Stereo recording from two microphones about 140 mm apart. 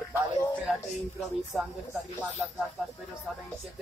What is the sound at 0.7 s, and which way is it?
Speech, centre (ahead or behind).